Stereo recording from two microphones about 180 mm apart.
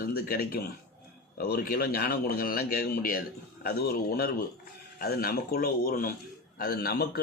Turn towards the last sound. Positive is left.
turn(degrees=60)  # may be behind; listen again after turning